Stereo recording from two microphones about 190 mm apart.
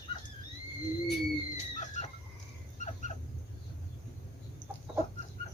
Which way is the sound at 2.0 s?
35° left (ahead or behind).